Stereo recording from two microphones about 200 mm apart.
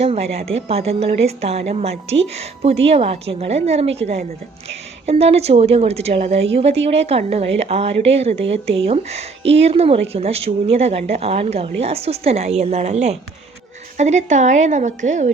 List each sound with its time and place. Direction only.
0.0 s a woman's voice: 30° right (ahead or behind)